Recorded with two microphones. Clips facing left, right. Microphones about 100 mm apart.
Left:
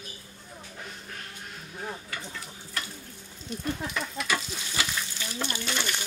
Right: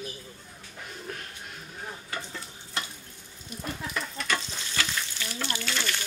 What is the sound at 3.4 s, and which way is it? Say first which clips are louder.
Frying: left 4 dB; centre (ahead or behind).